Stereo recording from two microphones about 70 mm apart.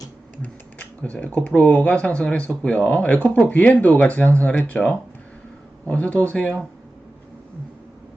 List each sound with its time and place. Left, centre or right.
0.4 s speech: left